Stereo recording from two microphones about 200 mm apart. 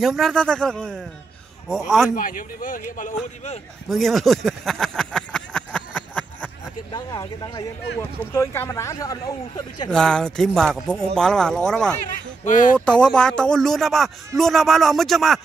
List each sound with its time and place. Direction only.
0.0 s a man's voice: centre (ahead or behind)
2.1 s speech: 45° left (ahead or behind)
3.9 s a sound: centre (ahead or behind)
6.9 s speech: 20° left (ahead or behind)
9.8 s a man's voice: 5° left (ahead or behind)
12.4 s speech: 40° left (ahead or behind)
13.0 s a man's voice: 5° left (ahead or behind)